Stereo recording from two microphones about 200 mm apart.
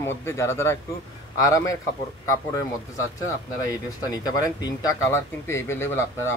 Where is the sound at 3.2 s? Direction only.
15° left (ahead or behind).